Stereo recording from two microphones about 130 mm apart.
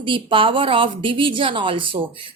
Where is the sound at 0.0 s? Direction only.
40° right (ahead or behind).